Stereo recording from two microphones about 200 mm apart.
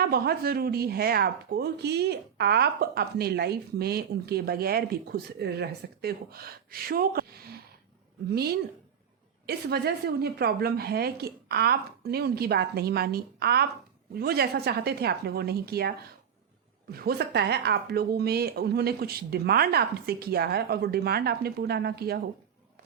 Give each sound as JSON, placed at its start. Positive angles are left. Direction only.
{"t": 0.0, "sound": "speech", "side_deg": -50}
{"t": 9.5, "sound": "speech", "side_deg": -50}
{"t": 16.9, "sound": "speech", "side_deg": -50}